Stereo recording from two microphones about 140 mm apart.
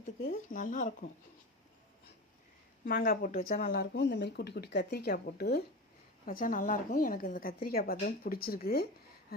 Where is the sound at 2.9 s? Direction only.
90° left.